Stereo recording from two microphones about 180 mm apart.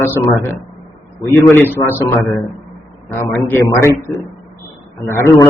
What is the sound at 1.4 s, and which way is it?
Speech, 15° left (ahead or behind).